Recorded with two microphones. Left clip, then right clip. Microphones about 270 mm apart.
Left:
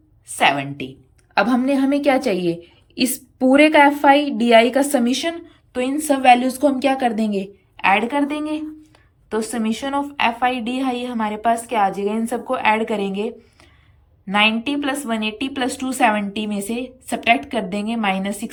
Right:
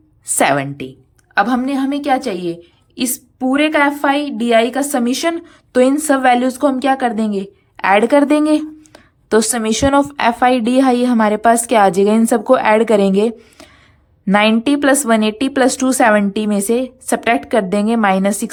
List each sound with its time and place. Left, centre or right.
0.4 s a woman's voice: centre